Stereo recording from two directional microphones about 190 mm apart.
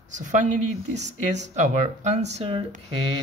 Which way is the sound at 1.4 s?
40° right (ahead or behind).